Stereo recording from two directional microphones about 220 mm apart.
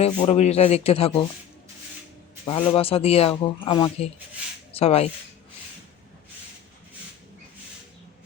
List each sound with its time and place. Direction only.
0.0 s speech: 30° left (ahead or behind)
2.5 s speech: 25° left (ahead or behind)